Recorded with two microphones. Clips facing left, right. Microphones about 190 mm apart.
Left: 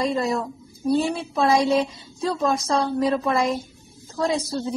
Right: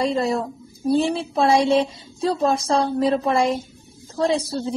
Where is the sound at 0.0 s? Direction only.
30° right (ahead or behind).